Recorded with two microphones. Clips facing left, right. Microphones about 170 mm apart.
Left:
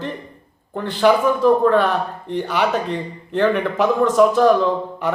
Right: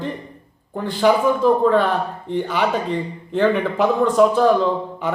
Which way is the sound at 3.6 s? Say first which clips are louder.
Even; 15° right (ahead or behind).